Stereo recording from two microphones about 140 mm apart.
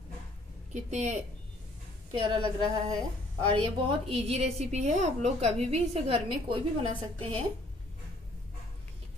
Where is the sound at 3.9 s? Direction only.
45° right (ahead or behind).